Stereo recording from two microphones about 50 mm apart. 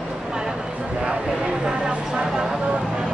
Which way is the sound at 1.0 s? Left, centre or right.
Centre.